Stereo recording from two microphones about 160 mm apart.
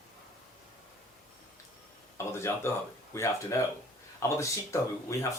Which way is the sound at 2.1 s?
15° left (ahead or behind).